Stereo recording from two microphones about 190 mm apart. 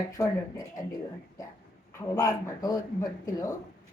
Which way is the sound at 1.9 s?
15° left (ahead or behind).